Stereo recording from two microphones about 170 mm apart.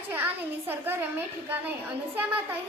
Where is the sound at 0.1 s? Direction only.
10° right (ahead or behind).